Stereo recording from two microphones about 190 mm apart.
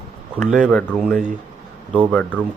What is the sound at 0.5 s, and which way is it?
Speech, 5° left (ahead or behind).